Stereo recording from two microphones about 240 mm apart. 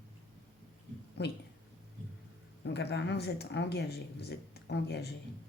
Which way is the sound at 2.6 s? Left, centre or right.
Left.